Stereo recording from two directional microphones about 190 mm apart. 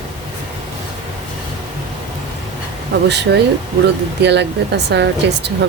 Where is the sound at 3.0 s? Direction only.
65° right (ahead or behind).